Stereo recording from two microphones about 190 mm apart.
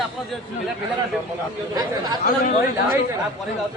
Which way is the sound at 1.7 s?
20° right (ahead or behind).